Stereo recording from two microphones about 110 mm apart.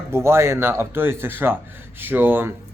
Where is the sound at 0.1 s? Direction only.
25° right (ahead or behind).